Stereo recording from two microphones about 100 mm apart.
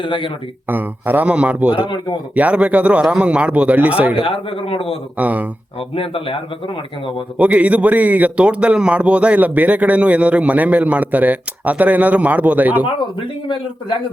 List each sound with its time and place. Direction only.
0.0 s speech: 55° left (ahead or behind)
0.7 s a man's voice: 20° right (ahead or behind)
4.1 s speech: 70° left (ahead or behind)
5.1 s a man's voice: 15° right (ahead or behind)
6.0 s speech: 65° left (ahead or behind)
7.3 s a man's voice: 15° right (ahead or behind)